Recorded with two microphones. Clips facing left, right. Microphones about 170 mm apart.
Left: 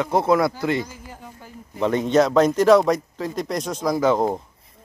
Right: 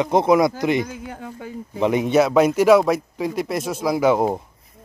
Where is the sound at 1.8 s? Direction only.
10° right (ahead or behind).